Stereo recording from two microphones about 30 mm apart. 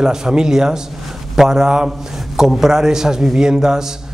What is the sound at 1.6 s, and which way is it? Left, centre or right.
Speech, right.